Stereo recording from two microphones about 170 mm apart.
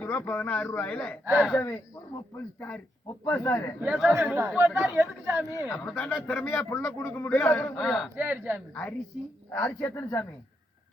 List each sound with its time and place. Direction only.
0.0 s a man's voice: 15° left (ahead or behind)
1.2 s speech: 10° right (ahead or behind)
1.5 s a man's voice: 15° left (ahead or behind)
3.8 s speech: 5° right (ahead or behind)
5.5 s a man's voice: 20° left (ahead or behind)
7.8 s speech: centre (ahead or behind)
8.2 s speech: 10° right (ahead or behind)
8.7 s a man's voice: 10° left (ahead or behind)